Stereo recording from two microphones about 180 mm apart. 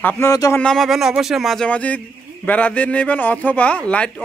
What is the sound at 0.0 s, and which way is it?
Speech, 15° left (ahead or behind).